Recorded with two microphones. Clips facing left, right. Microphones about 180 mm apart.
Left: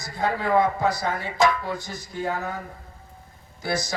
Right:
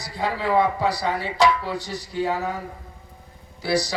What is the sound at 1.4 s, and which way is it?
Speech, 45° left (ahead or behind).